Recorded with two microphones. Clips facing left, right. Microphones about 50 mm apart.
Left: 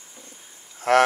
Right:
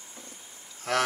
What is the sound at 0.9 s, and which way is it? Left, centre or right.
Livestock, left.